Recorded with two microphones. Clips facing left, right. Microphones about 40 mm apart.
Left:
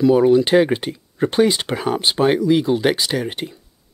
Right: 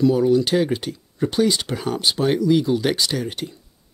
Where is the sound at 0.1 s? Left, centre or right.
Left.